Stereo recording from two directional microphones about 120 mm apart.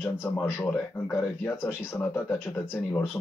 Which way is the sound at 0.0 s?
15° left (ahead or behind).